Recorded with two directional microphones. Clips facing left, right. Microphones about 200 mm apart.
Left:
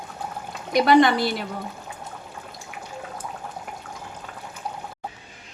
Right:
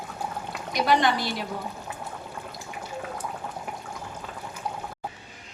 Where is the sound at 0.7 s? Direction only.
60° left (ahead or behind).